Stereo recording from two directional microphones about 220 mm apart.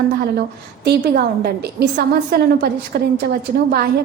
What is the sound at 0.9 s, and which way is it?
A woman's voice, 50° right (ahead or behind).